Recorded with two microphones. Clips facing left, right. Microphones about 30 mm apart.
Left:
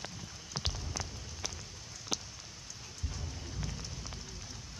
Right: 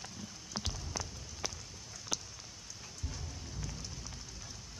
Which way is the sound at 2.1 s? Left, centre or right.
Centre.